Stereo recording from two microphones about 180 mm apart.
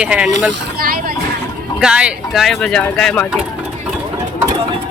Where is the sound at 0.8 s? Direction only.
55° right (ahead or behind).